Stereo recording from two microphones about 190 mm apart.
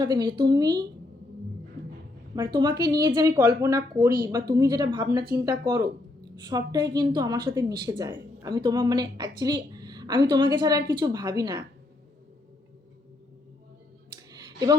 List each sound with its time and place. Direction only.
0.0 s a woman's voice: 20° right (ahead or behind)
2.3 s a woman's voice: 20° right (ahead or behind)
14.3 s clicking: 20° right (ahead or behind)